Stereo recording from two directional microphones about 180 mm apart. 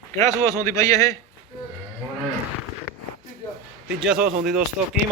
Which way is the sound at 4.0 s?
5° right (ahead or behind).